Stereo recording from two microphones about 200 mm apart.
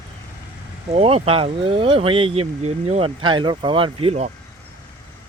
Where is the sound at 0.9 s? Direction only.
30° right (ahead or behind).